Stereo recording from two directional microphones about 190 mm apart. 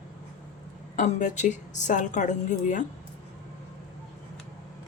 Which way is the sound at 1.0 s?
40° left (ahead or behind).